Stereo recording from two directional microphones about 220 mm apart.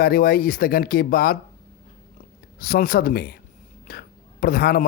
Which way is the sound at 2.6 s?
40° left (ahead or behind).